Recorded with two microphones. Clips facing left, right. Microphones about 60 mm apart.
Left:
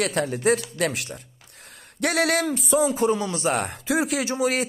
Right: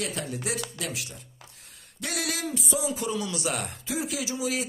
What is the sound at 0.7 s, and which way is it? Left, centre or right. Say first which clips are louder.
Speech: left 9 dB; left.